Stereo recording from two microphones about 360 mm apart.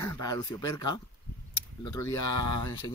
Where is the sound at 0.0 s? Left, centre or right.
Centre.